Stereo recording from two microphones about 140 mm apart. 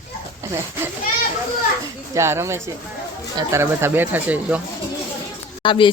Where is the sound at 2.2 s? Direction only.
20° right (ahead or behind).